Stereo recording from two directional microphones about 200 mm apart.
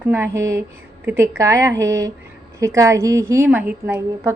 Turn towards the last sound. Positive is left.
turn(degrees=-10)  # may be behind; listen again after turning